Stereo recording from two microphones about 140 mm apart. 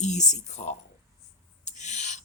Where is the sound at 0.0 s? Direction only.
55° left (ahead or behind).